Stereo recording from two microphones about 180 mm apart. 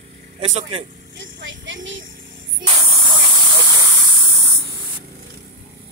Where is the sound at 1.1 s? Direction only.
90° right.